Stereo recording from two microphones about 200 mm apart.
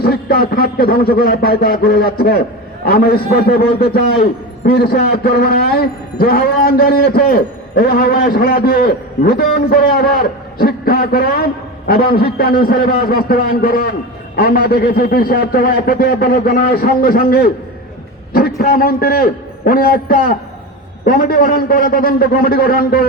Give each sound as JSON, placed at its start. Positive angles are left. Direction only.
{"t": 0.0, "sound": "a man's voice", "side_deg": 50}
{"t": 18.6, "sound": "a man's voice", "side_deg": 50}